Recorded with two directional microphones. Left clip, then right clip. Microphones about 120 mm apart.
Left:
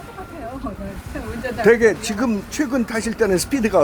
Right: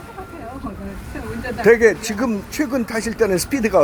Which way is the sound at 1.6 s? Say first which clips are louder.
Right 1 dB; 25° left (ahead or behind).